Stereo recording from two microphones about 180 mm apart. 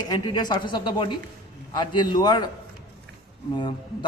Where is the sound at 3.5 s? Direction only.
25° left (ahead or behind).